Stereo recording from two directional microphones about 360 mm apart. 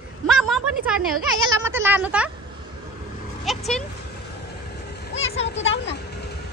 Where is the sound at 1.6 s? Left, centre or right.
Centre.